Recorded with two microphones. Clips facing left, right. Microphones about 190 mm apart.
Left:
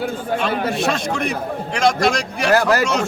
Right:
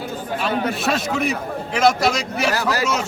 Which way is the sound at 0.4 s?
5° right (ahead or behind).